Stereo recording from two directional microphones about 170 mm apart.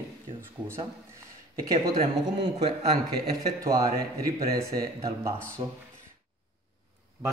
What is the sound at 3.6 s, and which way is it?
Speech, 20° right (ahead or behind).